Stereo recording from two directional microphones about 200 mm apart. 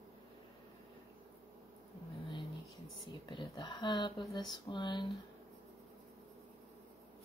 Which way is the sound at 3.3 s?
25° left (ahead or behind).